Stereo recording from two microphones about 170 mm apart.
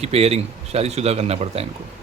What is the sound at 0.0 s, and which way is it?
Speech, 35° right (ahead or behind).